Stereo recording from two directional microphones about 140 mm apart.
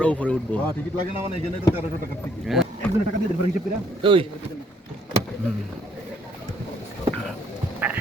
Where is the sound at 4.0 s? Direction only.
40° right (ahead or behind).